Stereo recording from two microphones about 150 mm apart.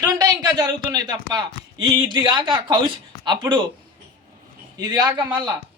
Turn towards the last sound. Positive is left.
turn(degrees=-30)  # may be behind; listen again after turning